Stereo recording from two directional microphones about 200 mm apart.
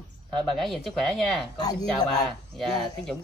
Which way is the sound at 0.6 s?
Centre (ahead or behind).